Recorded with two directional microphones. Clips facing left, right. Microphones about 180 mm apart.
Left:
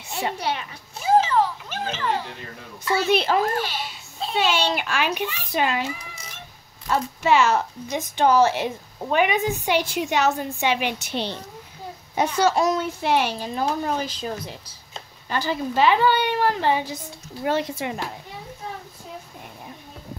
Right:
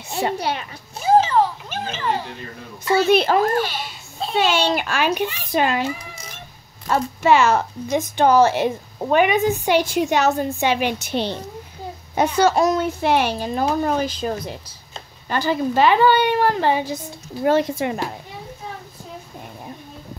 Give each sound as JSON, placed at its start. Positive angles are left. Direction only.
{"t": 0.1, "sound": "a sound", "side_deg": -40}
{"t": 1.7, "sound": "a child's voice", "side_deg": -20}
{"t": 3.1, "sound": "a child's voice", "side_deg": -50}
{"t": 6.9, "sound": "a child's voice", "side_deg": -50}